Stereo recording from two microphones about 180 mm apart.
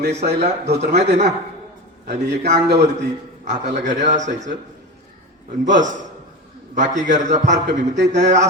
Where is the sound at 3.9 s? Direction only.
40° right (ahead or behind).